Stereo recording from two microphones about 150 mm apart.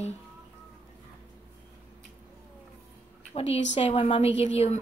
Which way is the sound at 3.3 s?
45° left (ahead or behind).